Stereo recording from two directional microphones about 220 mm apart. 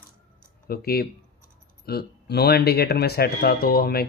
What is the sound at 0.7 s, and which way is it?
Speech, 45° left (ahead or behind).